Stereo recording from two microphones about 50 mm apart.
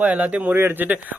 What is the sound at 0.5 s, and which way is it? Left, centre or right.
Speech, right.